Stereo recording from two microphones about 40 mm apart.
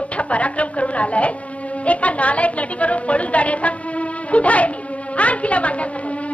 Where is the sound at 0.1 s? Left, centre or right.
Left.